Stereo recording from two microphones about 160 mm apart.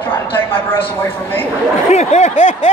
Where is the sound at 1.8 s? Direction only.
45° left (ahead or behind).